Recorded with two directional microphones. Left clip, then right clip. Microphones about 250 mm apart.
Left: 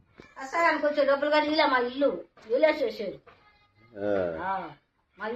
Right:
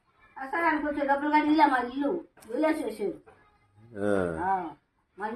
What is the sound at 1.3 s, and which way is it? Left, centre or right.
A woman's voice, centre.